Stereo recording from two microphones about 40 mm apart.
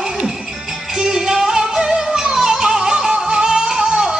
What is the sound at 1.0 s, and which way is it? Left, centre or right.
Music, centre.